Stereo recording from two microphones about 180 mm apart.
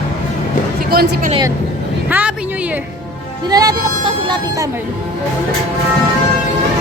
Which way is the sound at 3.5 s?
20° right (ahead or behind).